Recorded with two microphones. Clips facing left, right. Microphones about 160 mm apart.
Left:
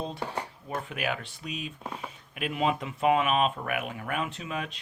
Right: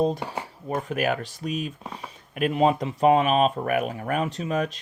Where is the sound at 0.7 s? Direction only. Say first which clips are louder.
Right 7 dB; 40° right (ahead or behind).